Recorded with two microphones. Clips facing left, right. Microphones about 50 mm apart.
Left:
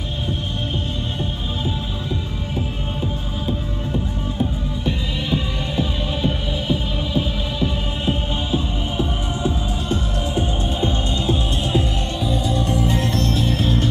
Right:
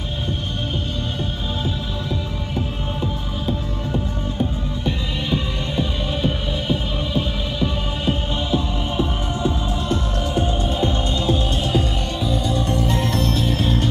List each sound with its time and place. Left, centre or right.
4.4 s music: centre
8.0 s music: centre
11.1 s music: left
12.3 s music: centre